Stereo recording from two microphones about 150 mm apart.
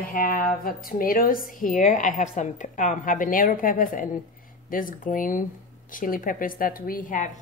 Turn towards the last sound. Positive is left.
turn(degrees=65)  # may be behind; listen again after turning